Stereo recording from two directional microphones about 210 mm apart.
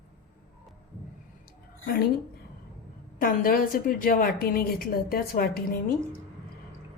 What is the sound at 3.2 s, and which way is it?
A woman's voice, 40° left (ahead or behind).